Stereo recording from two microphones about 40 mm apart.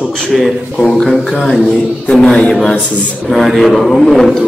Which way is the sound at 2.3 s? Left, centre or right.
Left.